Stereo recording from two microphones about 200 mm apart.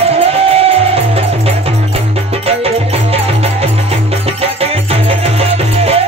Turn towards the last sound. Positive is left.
turn(degrees=-30)  # may be behind; listen again after turning